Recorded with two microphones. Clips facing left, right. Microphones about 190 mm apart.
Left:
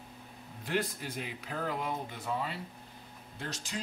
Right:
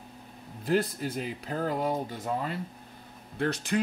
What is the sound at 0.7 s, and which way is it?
Speech, 40° right (ahead or behind).